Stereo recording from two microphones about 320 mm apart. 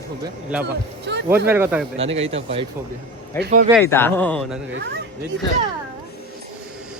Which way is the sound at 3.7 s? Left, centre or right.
Centre.